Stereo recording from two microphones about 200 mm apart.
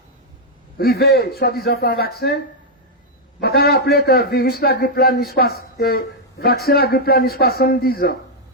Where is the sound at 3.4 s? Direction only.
50° left (ahead or behind).